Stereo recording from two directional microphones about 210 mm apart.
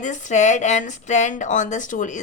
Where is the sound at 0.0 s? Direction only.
35° left (ahead or behind).